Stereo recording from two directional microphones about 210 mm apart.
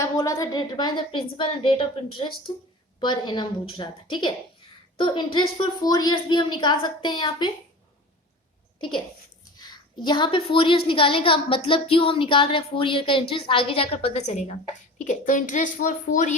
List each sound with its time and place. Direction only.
0.0 s a woman's voice: 15° left (ahead or behind)
9.4 s a woman's voice: 20° left (ahead or behind); by 16.3 s 35° left (ahead or behind)